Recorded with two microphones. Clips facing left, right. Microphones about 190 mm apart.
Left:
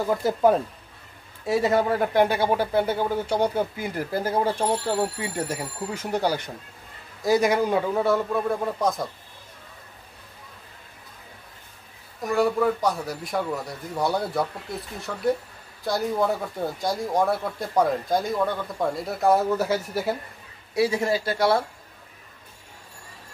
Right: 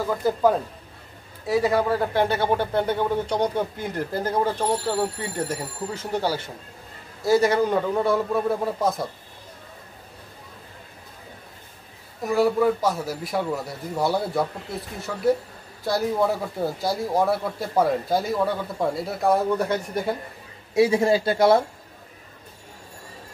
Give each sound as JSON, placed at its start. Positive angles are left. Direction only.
{"t": 0.1, "sound": "a man's voice", "side_deg": 20}
{"t": 12.2, "sound": "a man's voice", "side_deg": 0}
{"t": 20.7, "sound": "speech", "side_deg": -25}